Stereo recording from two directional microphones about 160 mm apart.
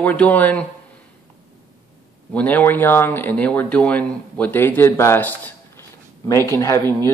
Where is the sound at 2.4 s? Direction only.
10° left (ahead or behind).